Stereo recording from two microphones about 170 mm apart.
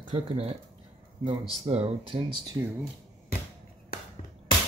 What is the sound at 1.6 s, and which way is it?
Speech, 35° right (ahead or behind).